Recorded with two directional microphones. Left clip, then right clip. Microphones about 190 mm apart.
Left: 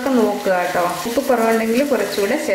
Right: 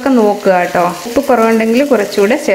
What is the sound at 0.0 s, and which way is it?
Speech, 45° right (ahead or behind).